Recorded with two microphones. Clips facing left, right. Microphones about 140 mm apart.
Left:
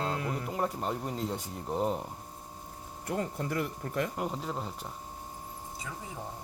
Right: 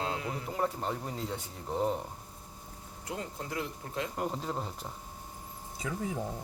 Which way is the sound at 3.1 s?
55° left (ahead or behind).